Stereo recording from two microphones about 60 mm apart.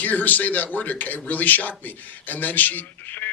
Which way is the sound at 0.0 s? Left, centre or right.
Left.